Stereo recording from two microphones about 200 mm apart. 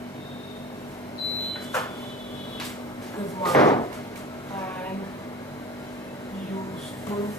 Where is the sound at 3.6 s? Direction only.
20° left (ahead or behind).